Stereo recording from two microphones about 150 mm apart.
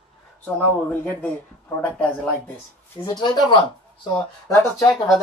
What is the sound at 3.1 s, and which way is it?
Speech, 30° left (ahead or behind).